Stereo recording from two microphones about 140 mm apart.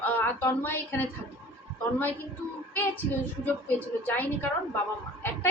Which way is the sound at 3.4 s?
15° left (ahead or behind).